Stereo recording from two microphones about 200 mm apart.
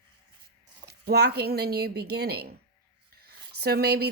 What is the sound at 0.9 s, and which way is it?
A woman's voice, 55° right (ahead or behind).